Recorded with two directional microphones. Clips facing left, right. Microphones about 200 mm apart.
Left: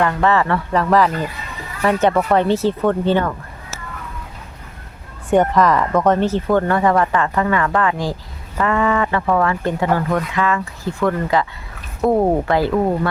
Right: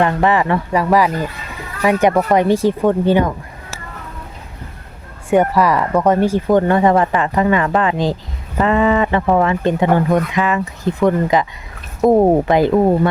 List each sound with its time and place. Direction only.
0.0 s speech: 20° right (ahead or behind)
5.3 s speech: 10° right (ahead or behind)